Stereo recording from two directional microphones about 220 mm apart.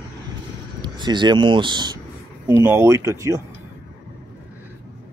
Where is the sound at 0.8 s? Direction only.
20° right (ahead or behind).